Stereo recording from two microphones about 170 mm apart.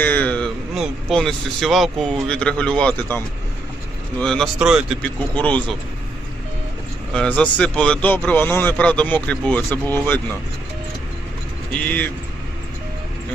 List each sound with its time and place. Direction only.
0.0 s a man's voice: 10° left (ahead or behind)
5.0 s a man's voice: 10° left (ahead or behind)
7.1 s a man's voice: 5° left (ahead or behind)
11.8 s a man's voice: 10° left (ahead or behind)